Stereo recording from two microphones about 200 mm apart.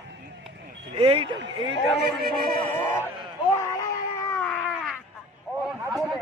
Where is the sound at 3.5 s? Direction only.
15° left (ahead or behind).